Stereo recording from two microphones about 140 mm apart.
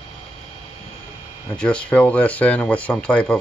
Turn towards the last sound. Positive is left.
turn(degrees=10)  # may be behind; listen again after turning